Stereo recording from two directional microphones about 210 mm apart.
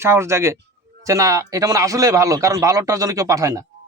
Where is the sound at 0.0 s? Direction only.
10° right (ahead or behind).